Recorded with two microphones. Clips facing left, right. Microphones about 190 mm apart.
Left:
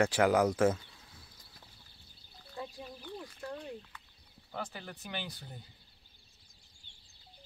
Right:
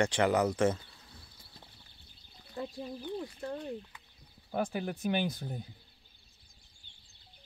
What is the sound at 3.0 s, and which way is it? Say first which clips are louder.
Speech: right 5 dB; 15° right (ahead or behind).